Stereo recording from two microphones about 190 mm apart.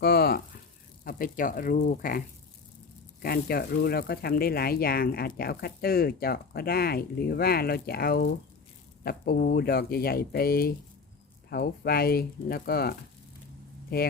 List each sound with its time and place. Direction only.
0.0 s frying: 55° left (ahead or behind)
1.0 s speech: 45° left (ahead or behind)
3.2 s speech: 55° left (ahead or behind)